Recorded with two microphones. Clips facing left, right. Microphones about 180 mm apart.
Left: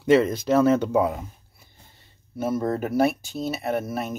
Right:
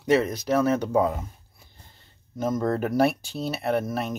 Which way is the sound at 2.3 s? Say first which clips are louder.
Even; 10° left (ahead or behind).